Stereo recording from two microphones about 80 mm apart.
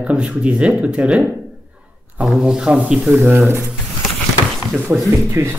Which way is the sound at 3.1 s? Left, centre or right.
Right.